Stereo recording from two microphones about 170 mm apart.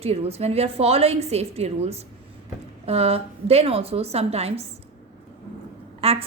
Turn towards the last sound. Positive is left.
turn(degrees=-35)  # may be behind; listen again after turning